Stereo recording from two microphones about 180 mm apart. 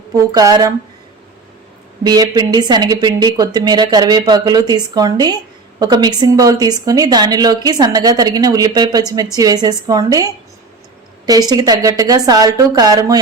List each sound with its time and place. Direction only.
0.1 s a woman's voice: 20° right (ahead or behind)
2.0 s a woman's voice: 20° right (ahead or behind)